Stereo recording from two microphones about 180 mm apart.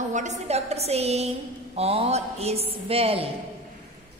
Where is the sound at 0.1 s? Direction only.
40° right (ahead or behind).